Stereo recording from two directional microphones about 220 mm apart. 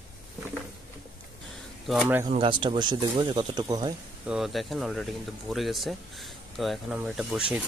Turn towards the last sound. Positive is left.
turn(degrees=-5)  # may be behind; listen again after turning